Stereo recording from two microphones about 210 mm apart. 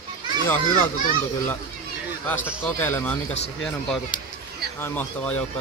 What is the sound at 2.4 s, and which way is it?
Speech, 5° right (ahead or behind).